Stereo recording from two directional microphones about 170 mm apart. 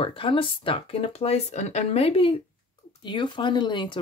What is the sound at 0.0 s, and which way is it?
Speech, 30° left (ahead or behind).